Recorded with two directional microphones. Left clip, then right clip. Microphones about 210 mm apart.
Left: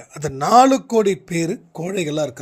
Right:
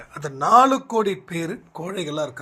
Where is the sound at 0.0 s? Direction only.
60° left (ahead or behind).